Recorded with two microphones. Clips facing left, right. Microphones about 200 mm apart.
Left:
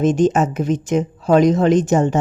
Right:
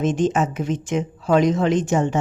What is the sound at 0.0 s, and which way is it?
Speech, 40° left (ahead or behind).